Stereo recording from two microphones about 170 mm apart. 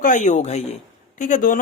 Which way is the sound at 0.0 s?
45° left (ahead or behind).